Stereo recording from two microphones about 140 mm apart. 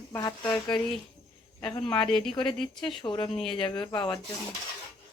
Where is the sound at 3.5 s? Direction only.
35° left (ahead or behind).